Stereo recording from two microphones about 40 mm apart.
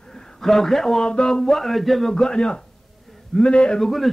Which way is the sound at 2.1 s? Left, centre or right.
Centre.